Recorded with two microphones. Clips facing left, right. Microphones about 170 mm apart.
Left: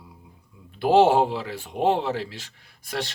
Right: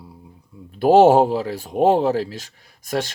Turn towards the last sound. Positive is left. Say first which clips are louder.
# right 6 dB
turn(degrees=-45)  # may be behind; listen again after turning